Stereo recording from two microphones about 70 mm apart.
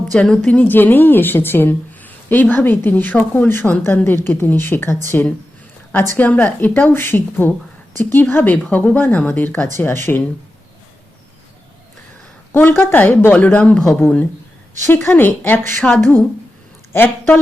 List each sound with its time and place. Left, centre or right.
0.1 s a woman's voice: centre
9.7 s a woman's voice: left
12.5 s a woman's voice: left
14.0 s a woman's voice: left